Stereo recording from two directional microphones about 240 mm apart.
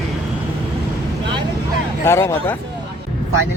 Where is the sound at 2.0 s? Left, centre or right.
Centre.